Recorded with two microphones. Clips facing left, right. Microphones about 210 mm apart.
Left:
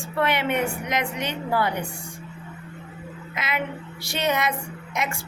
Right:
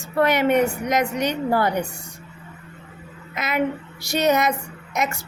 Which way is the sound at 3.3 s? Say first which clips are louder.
Right 6 dB; 45° right (ahead or behind).